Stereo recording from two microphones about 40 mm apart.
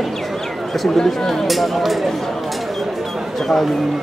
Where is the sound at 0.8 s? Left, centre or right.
Centre.